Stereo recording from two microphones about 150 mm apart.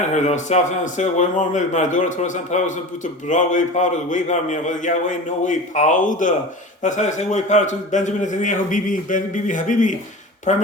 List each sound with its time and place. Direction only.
0.1 s a man's voice: 50° left (ahead or behind)